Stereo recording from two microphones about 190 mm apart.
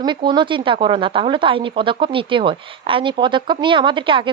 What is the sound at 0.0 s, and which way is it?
Speech, 25° right (ahead or behind).